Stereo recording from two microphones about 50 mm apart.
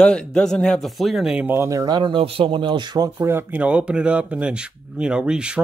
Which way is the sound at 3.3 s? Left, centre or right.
Right.